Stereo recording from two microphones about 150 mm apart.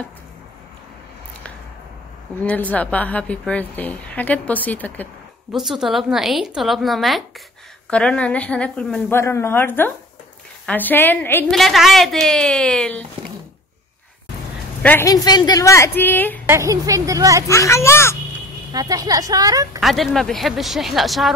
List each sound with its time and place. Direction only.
2.4 s a woman's voice: 10° left (ahead or behind)
5.5 s a woman's voice: centre (ahead or behind)
9.2 s a woman's voice: 20° left (ahead or behind)
11.5 s a woman's voice: centre (ahead or behind)
14.8 s a woman's voice: 10° left (ahead or behind)
15.0 s a woman's voice: 25° left (ahead or behind)
16.4 s speech: 20° right (ahead or behind)
17.5 s a woman's voice: 20° left (ahead or behind)
18.7 s speech: 25° right (ahead or behind)
19.8 s a woman's voice: centre (ahead or behind)